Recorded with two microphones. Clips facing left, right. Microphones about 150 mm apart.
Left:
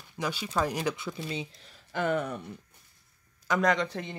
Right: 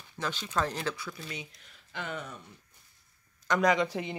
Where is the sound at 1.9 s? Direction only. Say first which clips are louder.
Left 10 dB; 50° left (ahead or behind).